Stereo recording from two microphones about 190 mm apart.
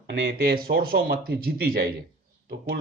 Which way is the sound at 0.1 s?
55° right (ahead or behind).